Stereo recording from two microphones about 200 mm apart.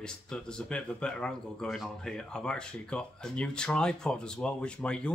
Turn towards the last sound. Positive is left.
turn(degrees=5)  # may be behind; listen again after turning